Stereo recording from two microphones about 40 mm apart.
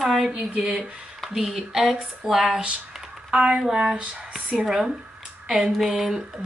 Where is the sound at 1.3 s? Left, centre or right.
Centre.